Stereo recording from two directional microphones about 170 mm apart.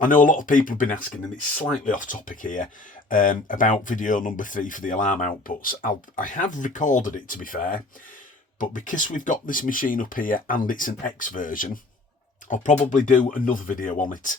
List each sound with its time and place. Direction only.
0.0 s speech: 50° left (ahead or behind)